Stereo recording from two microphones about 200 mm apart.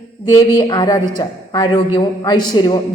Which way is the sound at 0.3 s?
20° left (ahead or behind).